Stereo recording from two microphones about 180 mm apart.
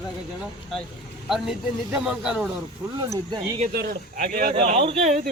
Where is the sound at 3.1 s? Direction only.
25° right (ahead or behind).